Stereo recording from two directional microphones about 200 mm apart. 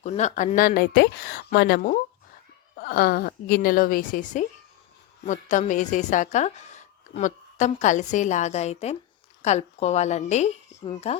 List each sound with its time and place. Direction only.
0.0 s a woman's voice: 35° left (ahead or behind)